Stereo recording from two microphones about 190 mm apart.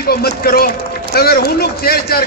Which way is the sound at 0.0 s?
55° left (ahead or behind).